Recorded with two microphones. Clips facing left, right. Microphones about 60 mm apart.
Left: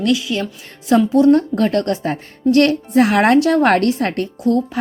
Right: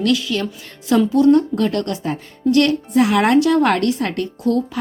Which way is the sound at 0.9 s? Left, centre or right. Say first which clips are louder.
Left 2 dB; left.